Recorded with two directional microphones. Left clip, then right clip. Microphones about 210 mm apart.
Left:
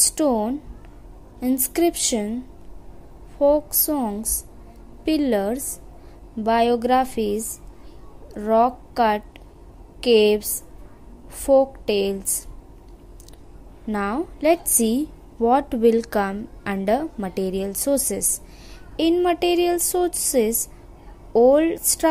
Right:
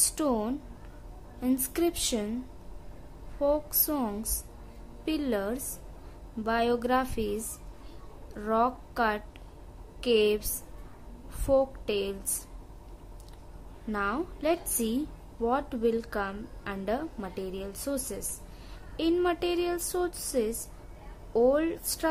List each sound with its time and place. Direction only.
0.0 s a woman's voice: 15° left (ahead or behind)
3.3 s a woman's voice: 15° left (ahead or behind)
13.9 s a woman's voice: 20° left (ahead or behind)